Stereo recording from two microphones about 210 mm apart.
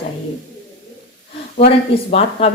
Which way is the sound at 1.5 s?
30° left (ahead or behind).